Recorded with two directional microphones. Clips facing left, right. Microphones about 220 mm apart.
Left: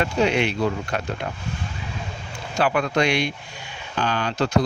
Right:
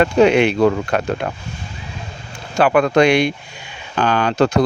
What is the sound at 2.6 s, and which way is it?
Speech, 65° right (ahead or behind).